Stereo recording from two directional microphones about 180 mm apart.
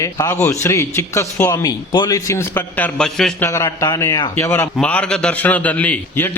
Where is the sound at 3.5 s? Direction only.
15° left (ahead or behind).